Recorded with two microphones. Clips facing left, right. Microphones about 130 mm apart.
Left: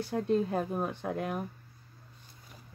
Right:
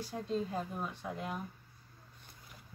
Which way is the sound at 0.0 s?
60° left (ahead or behind).